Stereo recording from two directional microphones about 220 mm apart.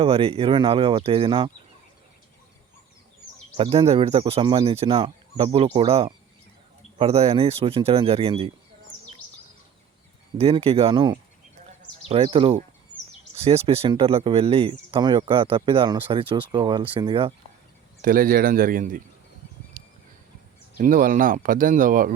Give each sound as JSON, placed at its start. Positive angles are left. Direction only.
{"t": 0.0, "sound": "speech", "side_deg": -25}
{"t": 3.6, "sound": "speech", "side_deg": -25}
{"t": 10.3, "sound": "speech", "side_deg": -25}
{"t": 18.0, "sound": "speech", "side_deg": -40}
{"t": 19.8, "sound": "a sound", "side_deg": -35}
{"t": 20.7, "sound": "speech", "side_deg": -40}